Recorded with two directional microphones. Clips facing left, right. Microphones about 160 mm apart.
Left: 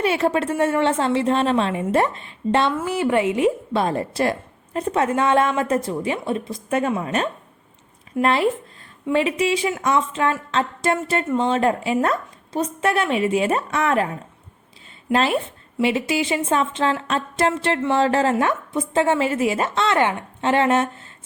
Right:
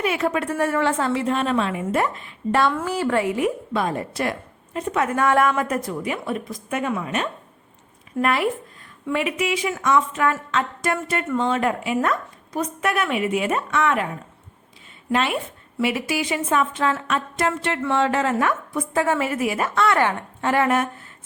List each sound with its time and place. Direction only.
0.0 s a woman's voice: 30° left (ahead or behind)
3.7 s a woman's voice: 30° left (ahead or behind)
15.1 s a woman's voice: 35° left (ahead or behind)